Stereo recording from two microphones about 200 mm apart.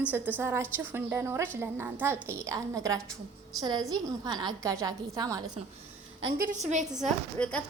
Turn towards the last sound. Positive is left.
turn(degrees=0)  # may be behind; listen again after turning